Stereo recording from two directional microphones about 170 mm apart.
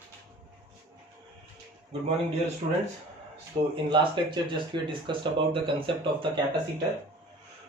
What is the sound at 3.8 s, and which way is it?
Speech, 25° right (ahead or behind).